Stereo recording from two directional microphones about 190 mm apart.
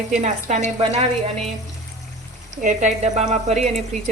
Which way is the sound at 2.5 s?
40° right (ahead or behind).